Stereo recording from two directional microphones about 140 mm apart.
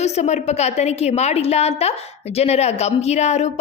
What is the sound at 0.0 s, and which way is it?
A woman's voice, 50° left (ahead or behind).